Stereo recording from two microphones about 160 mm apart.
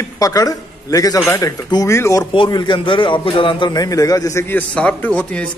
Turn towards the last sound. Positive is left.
turn(degrees=10)  # may be behind; listen again after turning